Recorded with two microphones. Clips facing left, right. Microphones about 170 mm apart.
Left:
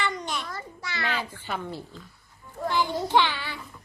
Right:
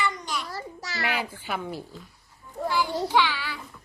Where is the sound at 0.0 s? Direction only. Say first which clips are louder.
Even; 25° left (ahead or behind).